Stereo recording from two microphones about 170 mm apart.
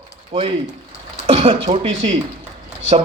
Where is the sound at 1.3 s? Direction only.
35° right (ahead or behind).